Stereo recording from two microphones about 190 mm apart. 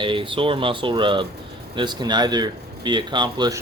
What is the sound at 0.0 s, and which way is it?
Speech, 25° right (ahead or behind).